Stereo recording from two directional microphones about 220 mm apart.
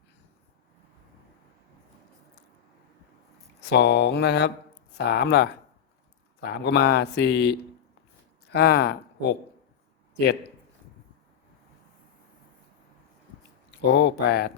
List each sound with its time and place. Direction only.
3.7 s speech: 50° left (ahead or behind)
13.8 s speech: 55° left (ahead or behind)